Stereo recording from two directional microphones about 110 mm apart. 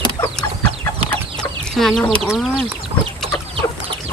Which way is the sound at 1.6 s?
5° left (ahead or behind).